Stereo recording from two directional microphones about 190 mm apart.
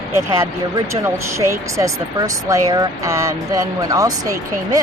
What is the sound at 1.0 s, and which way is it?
Speech, 15° right (ahead or behind).